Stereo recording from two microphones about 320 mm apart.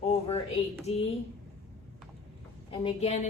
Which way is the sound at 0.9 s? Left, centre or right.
Centre.